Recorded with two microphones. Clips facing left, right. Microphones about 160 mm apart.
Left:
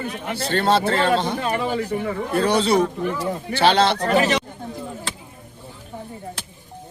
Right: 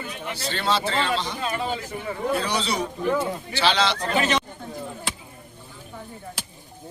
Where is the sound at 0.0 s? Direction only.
50° left (ahead or behind).